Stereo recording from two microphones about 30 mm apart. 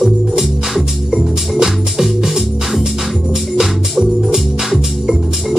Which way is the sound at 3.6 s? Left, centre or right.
Centre.